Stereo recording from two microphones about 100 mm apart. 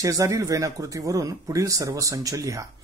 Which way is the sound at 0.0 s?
35° right (ahead or behind).